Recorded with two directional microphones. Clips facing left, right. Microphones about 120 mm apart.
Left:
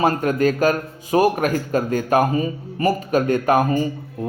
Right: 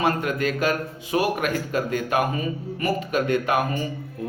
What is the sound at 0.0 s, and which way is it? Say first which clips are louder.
A man's voice: left 5 dB; 40° left (ahead or behind).